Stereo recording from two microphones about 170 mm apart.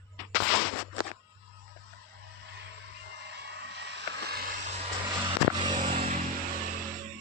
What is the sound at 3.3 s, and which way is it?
Vehicle, 85° right.